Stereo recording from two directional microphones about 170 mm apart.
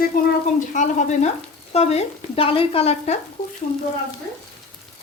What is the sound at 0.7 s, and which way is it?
Speech, 45° left (ahead or behind).